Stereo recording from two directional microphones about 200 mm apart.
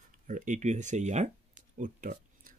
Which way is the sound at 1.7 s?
40° right (ahead or behind).